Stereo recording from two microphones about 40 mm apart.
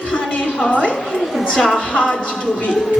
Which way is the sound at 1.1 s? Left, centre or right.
Centre.